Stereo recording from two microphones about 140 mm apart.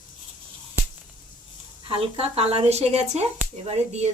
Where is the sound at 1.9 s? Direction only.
45° right (ahead or behind).